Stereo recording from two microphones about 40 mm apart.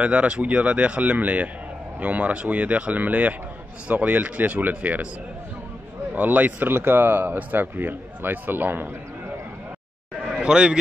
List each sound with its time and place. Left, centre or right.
0.0 s speech: right
6.1 s a man's voice: right
6.8 s a man's voice: right
10.3 s a man's voice: right